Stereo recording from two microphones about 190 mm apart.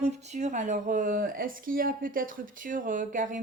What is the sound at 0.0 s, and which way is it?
Speech, 35° right (ahead or behind).